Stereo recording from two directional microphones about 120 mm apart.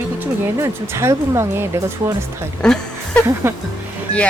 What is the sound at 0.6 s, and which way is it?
Speech, 25° right (ahead or behind).